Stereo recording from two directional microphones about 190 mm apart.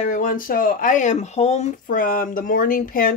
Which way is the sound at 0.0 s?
45° left (ahead or behind).